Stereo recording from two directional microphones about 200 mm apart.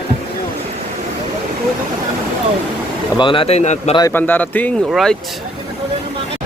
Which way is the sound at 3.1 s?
25° left (ahead or behind).